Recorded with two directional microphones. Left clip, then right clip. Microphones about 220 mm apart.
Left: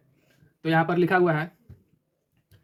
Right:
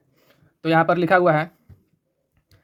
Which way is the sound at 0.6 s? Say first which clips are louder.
Right 5 dB; 55° right (ahead or behind).